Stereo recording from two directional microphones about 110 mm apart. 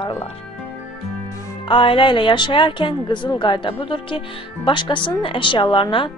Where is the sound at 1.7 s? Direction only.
50° left (ahead or behind).